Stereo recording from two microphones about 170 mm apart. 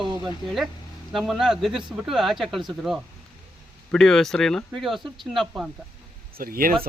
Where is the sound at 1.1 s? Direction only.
Centre (ahead or behind).